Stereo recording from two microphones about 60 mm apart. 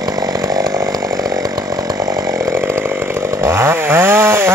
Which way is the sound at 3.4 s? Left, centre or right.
Right.